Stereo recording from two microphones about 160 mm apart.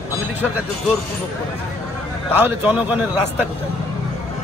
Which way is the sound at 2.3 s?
10° right (ahead or behind).